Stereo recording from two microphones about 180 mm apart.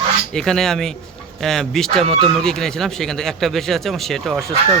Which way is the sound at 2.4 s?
5° left (ahead or behind).